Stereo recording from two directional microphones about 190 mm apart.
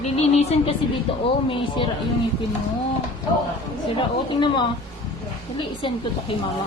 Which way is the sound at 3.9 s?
25° left (ahead or behind).